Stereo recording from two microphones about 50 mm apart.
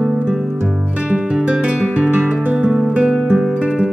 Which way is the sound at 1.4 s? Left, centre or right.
Centre.